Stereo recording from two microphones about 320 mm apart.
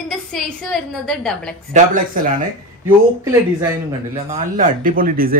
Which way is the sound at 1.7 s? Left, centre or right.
Right.